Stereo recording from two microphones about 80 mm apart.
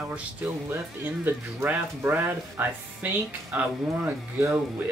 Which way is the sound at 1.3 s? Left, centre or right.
Right.